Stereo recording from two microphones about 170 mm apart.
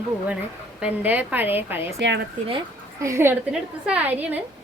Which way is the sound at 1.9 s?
90° right.